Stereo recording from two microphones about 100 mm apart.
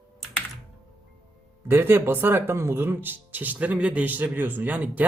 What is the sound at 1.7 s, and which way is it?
Speech, 25° right (ahead or behind).